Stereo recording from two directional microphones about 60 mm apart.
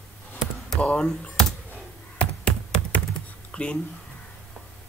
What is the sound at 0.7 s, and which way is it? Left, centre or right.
Speech, left.